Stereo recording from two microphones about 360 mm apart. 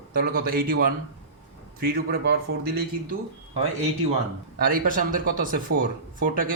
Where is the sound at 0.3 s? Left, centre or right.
Right.